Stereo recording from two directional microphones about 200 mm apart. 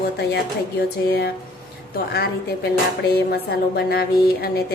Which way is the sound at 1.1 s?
50° left (ahead or behind).